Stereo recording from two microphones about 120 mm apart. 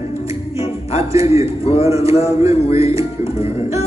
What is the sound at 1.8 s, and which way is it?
Music, 25° right (ahead or behind).